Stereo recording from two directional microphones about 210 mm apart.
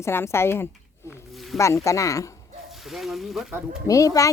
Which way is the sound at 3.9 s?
15° left (ahead or behind).